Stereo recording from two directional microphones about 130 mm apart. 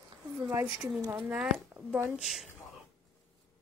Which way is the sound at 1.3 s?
5° right (ahead or behind).